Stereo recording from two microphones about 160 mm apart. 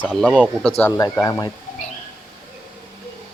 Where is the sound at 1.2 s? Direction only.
20° left (ahead or behind).